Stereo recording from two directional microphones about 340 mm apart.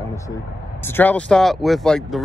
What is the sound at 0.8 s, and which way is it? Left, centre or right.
Speech, centre.